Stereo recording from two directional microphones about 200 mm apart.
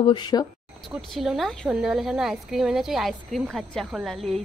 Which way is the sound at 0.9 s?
Centre (ahead or behind).